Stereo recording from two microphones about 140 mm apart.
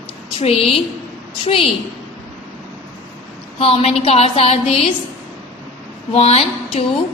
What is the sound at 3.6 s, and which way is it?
A woman's voice, 45° left (ahead or behind).